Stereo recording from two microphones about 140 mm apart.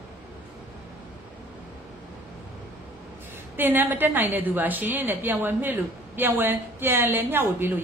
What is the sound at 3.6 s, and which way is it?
A woman's voice, 15° right (ahead or behind).